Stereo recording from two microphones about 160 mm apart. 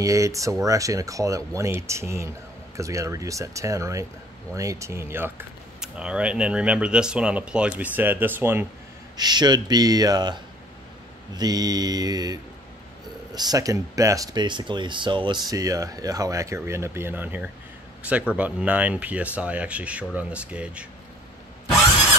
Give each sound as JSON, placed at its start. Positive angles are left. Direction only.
{"t": 0.0, "sound": "speech", "side_deg": -20}
{"t": 9.1, "sound": "speech", "side_deg": -25}